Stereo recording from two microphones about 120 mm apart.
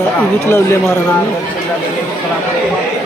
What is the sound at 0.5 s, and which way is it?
Speech, 20° left (ahead or behind).